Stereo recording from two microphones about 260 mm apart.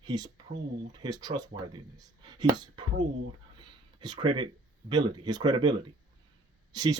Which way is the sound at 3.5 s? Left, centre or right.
Centre.